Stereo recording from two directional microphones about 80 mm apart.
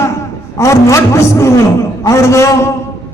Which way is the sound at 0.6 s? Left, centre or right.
Left.